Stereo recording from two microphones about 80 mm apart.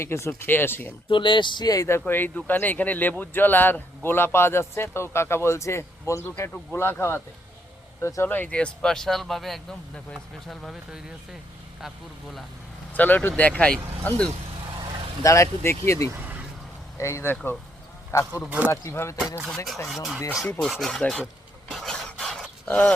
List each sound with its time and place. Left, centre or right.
0.0 s speech: left
1.1 s speech: left
1.6 s speech: left
1.9 s speech: left
8.3 s speech: centre
12.9 s speech: left
15.2 s speech: left
18.4 s speech: centre
18.7 s speech: left
19.9 s speech: centre
21.7 s a sound: centre